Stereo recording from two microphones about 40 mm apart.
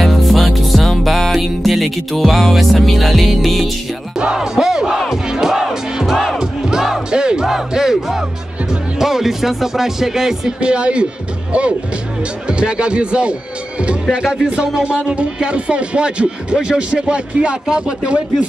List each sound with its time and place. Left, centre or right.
0.0 s music: centre
4.2 s music: centre
5.1 s crowd: centre
7.1 s music: right
7.4 s music: centre
8.9 s speech: centre
10.6 s speech: right
12.4 s speech: right
14.1 s speech: centre